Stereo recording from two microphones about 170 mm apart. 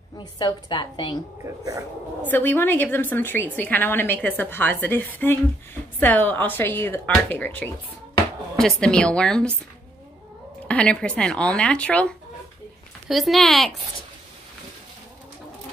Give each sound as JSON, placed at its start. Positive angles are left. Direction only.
{"t": 0.2, "sound": "a woman's voice", "side_deg": 25}
{"t": 1.4, "sound": "speech", "side_deg": -20}
{"t": 2.2, "sound": "a woman's voice", "side_deg": 10}
{"t": 10.7, "sound": "speech", "side_deg": 5}